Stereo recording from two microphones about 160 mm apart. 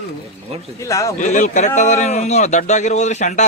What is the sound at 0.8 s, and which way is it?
Speech, 20° left (ahead or behind).